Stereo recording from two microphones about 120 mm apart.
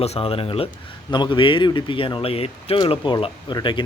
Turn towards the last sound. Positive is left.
turn(degrees=40)  # may be behind; listen again after turning